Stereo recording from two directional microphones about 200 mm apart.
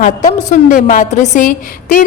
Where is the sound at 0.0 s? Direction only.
40° left (ahead or behind).